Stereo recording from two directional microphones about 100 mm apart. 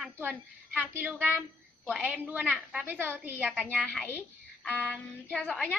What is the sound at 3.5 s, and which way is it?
Speech, 10° left (ahead or behind).